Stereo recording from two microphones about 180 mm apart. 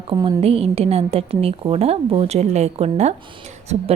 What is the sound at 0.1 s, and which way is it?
A woman's voice, 30° right (ahead or behind).